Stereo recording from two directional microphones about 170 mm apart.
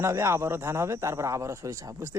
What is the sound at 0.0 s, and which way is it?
A man's voice, 15° right (ahead or behind).